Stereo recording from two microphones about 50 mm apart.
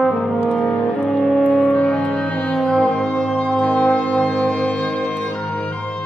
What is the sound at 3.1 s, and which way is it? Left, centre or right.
Brass instrument, left.